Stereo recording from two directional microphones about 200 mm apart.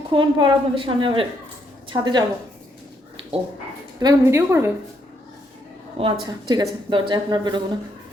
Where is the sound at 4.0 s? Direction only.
15° right (ahead or behind).